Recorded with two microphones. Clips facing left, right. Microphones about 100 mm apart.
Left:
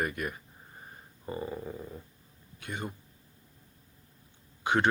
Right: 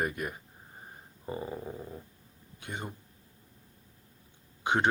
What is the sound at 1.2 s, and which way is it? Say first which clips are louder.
Dog: left 1 dB; 15° right (ahead or behind).